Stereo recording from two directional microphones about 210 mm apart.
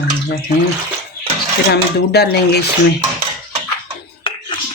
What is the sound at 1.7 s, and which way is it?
Speech, 50° left (ahead or behind).